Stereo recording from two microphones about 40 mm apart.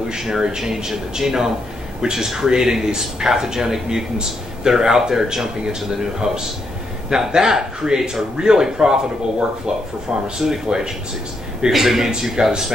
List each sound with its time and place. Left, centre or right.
0.1 s speech: centre